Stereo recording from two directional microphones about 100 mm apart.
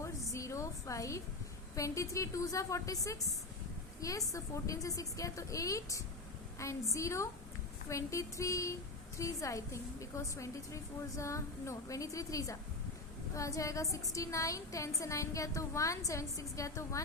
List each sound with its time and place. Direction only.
0.0 s a sound: 30° left (ahead or behind)
1.7 s a woman's voice: 30° left (ahead or behind)
4.3 s a woman's voice: 35° left (ahead or behind)